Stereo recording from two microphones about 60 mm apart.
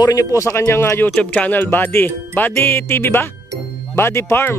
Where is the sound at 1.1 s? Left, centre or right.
Left.